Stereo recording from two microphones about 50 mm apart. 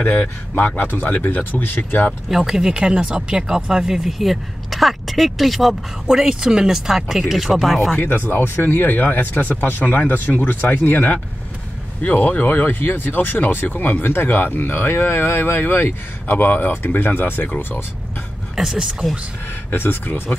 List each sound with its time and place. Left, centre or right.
0.1 s speech: left
0.8 s speech: left
2.2 s speech: centre
4.2 s speech: centre
8.0 s speech: left
18.6 s speech: centre
19.7 s speech: left